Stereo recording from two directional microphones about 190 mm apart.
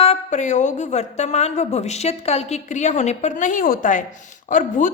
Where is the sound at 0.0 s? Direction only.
35° left (ahead or behind).